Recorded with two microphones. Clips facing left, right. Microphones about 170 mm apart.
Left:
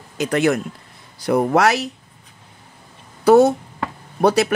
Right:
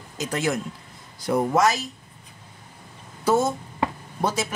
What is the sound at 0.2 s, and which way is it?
Speech, 65° left (ahead or behind).